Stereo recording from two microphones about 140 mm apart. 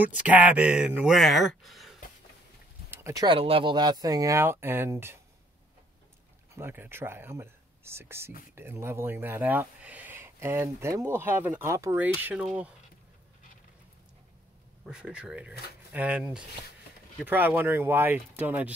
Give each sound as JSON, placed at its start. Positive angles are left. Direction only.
{"t": 0.0, "sound": "speech", "side_deg": -10}
{"t": 2.9, "sound": "a sound", "side_deg": -20}
{"t": 3.3, "sound": "speech", "side_deg": -40}
{"t": 6.5, "sound": "speech", "side_deg": -15}
{"t": 14.9, "sound": "speech", "side_deg": -5}